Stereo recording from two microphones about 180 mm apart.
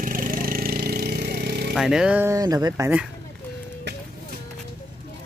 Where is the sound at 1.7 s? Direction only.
5° right (ahead or behind).